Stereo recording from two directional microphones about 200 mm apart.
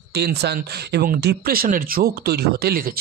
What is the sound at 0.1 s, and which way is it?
Speech, 55° right (ahead or behind).